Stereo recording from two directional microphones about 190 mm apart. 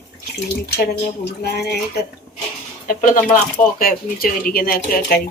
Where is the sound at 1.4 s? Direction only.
60° left (ahead or behind).